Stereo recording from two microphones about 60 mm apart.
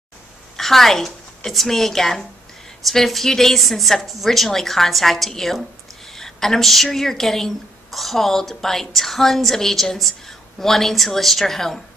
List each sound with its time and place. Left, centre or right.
0.6 s a woman's voice: centre